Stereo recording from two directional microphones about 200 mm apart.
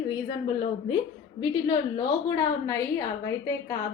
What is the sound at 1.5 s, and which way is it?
A woman's voice, 20° left (ahead or behind).